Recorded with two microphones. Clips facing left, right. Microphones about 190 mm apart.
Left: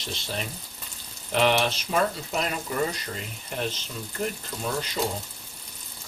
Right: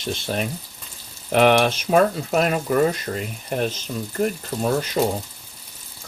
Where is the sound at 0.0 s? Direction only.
55° right (ahead or behind).